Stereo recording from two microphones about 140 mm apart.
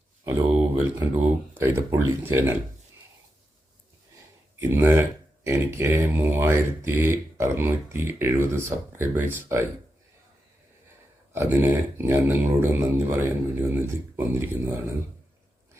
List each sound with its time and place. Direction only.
0.3 s speech: 15° right (ahead or behind)
4.7 s speech: 15° right (ahead or behind)
11.3 s speech: 15° right (ahead or behind)